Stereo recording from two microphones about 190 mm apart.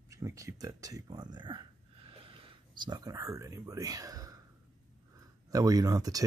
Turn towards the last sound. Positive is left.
turn(degrees=-20)  # may be behind; listen again after turning